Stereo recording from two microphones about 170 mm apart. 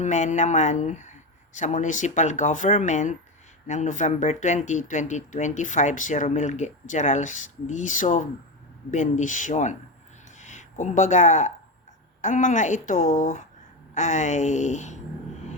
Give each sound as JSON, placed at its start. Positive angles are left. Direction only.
{"t": 0.0, "sound": "speech", "side_deg": 45}
{"t": 10.2, "sound": "a sound", "side_deg": 45}
{"t": 12.2, "sound": "speech", "side_deg": 50}